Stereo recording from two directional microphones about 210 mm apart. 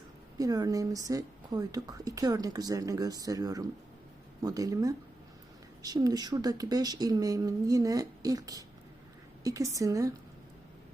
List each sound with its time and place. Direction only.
0.3 s speech: 15° right (ahead or behind)